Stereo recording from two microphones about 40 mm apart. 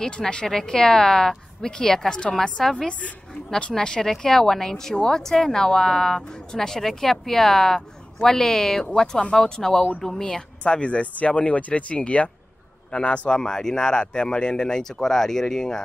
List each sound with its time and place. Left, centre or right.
0.5 s speech: centre
2.6 s a man's voice: centre
5.2 s speech: centre
10.6 s a man's voice: left
13.3 s speech: centre